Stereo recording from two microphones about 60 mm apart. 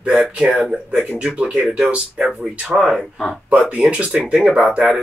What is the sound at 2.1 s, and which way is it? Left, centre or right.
Speech, centre.